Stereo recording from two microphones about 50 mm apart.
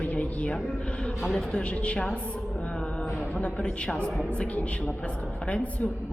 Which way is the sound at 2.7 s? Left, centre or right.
Left.